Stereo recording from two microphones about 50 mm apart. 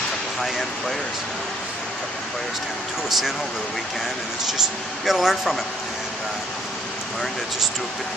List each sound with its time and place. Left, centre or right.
0.4 s speech: centre
5.0 s speech: centre